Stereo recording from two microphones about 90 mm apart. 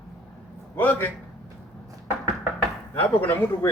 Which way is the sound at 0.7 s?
20° left (ahead or behind).